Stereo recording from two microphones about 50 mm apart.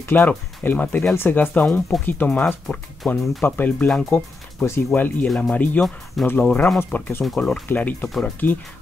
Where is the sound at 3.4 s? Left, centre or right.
Left.